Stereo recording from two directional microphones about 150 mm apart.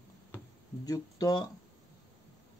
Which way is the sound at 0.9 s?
25° left (ahead or behind).